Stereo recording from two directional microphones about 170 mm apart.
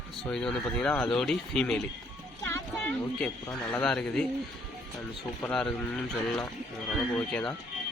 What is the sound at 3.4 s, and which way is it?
Speech, 10° left (ahead or behind).